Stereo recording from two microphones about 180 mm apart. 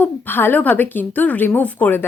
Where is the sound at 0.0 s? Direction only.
10° left (ahead or behind).